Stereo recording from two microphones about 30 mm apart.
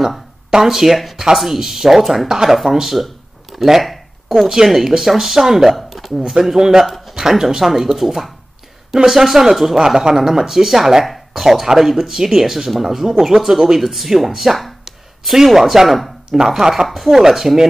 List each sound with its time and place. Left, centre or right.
0.5 s speech: centre
5.7 s a sound: centre
6.6 s speech: centre
9.8 s speech: centre